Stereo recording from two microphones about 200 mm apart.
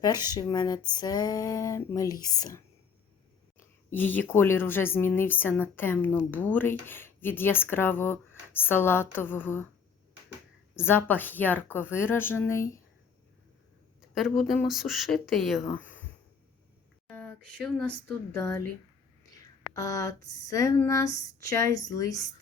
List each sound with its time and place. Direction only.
0.3 s speech: 20° left (ahead or behind)
3.9 s speech: 10° left (ahead or behind)
10.8 s speech: 10° left (ahead or behind)
14.2 s speech: centre (ahead or behind)
17.1 s a sound: 5° left (ahead or behind)
18.3 s speech: 15° left (ahead or behind)